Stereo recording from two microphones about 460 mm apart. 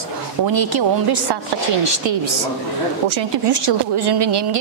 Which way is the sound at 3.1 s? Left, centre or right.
Right.